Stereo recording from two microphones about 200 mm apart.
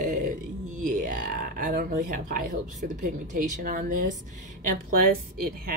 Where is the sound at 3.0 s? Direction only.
40° right (ahead or behind).